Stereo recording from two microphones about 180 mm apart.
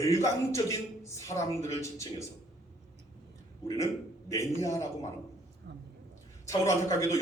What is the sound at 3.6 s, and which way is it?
A man's voice, 15° left (ahead or behind).